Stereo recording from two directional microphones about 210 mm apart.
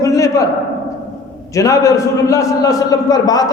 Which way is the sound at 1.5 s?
15° left (ahead or behind).